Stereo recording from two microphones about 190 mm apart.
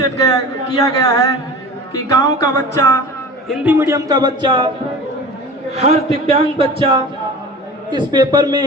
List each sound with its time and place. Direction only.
0.0 s speech: 20° left (ahead or behind)
3.5 s a man's voice: 10° right (ahead or behind); by 4.7 s 25° right (ahead or behind)
5.7 s a man's voice: 35° right (ahead or behind)